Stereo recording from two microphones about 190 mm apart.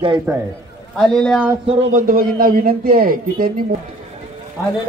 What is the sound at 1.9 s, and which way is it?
Speech, 45° right (ahead or behind).